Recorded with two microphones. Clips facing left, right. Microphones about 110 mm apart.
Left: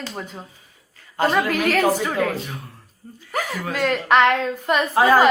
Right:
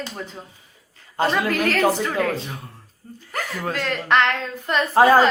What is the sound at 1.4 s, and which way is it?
A woman's voice, 5° left (ahead or behind).